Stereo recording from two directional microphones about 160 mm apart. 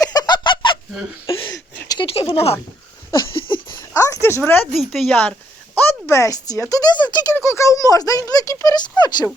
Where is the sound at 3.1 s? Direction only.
30° left (ahead or behind).